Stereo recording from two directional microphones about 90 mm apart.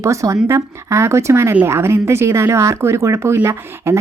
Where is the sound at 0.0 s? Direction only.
35° right (ahead or behind).